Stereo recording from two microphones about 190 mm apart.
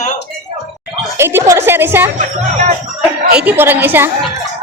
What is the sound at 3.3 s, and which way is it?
Speech, 10° right (ahead or behind).